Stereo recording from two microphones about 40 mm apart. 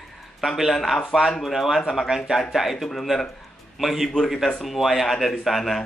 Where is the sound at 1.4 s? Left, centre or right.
Centre.